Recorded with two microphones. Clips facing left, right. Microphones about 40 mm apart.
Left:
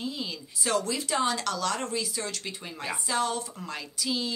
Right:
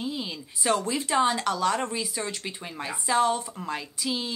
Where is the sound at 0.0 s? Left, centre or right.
Centre.